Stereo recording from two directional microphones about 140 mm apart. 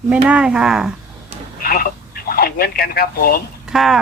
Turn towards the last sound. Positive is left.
turn(degrees=0)  # may be behind; listen again after turning